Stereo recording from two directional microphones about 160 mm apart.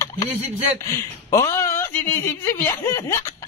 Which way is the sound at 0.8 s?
20° left (ahead or behind).